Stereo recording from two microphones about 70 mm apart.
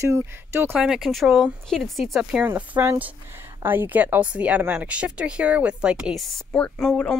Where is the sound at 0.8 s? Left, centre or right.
Centre.